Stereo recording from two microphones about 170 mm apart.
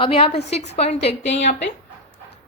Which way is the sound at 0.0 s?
35° left (ahead or behind).